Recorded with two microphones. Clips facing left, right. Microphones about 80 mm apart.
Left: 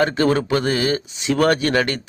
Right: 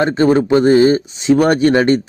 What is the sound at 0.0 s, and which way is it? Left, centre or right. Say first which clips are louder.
Speech: right 5 dB; right.